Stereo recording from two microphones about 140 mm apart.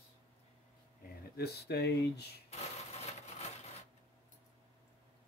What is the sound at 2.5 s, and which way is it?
Sewing machine, 50° left (ahead or behind).